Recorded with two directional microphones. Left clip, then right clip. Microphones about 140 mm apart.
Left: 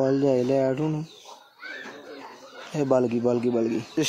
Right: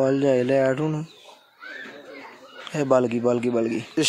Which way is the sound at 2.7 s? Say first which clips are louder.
Right 2 dB; 10° right (ahead or behind).